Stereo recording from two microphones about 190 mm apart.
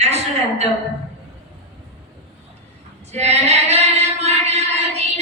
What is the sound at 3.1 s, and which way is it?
Female singing, 35° right (ahead or behind).